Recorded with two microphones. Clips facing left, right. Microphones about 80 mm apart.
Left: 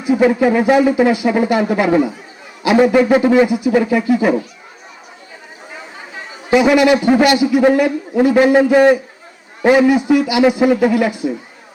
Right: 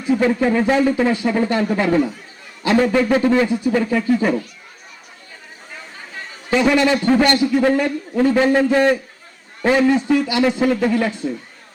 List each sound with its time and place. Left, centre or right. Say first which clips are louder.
0.0 s speech: left 4 dB; centre
5.7 s a man's voice: left 2 dB; centre